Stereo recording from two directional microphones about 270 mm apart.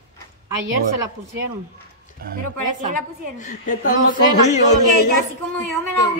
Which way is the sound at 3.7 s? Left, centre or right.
Left.